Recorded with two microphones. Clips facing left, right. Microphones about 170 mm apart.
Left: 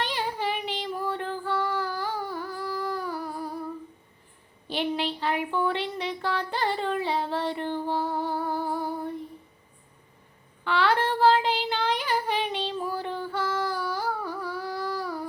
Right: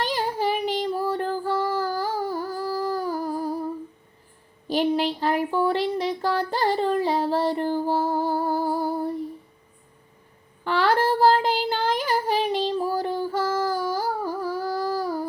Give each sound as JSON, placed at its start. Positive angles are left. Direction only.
{"t": 0.0, "sound": "child singing", "side_deg": -40}
{"t": 4.7, "sound": "a sound", "side_deg": -40}
{"t": 10.6, "sound": "child singing", "side_deg": -40}